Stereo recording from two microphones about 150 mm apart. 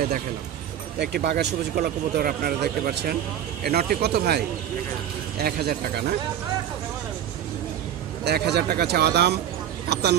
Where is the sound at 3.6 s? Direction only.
90° right.